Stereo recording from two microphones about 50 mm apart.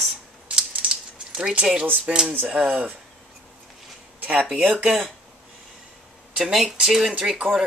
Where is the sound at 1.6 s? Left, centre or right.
Centre.